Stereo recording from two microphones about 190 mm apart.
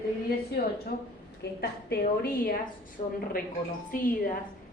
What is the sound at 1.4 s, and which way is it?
A woman's voice, 60° left (ahead or behind).